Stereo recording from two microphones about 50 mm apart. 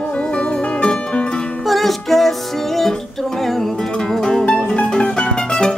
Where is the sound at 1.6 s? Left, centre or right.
Centre.